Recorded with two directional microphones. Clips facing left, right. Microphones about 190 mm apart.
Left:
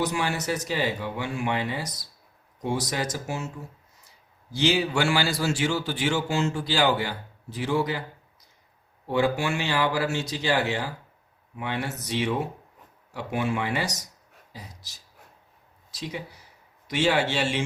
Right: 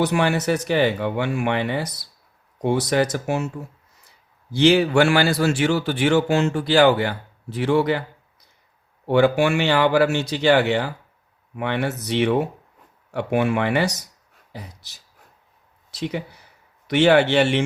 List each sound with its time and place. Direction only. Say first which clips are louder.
0.0 s a man's voice: right 7 dB; 65° right (ahead or behind)
4.5 s a man's voice: right 8 dB; 60° right (ahead or behind)
9.0 s a man's voice: right 7 dB; 70° right (ahead or behind)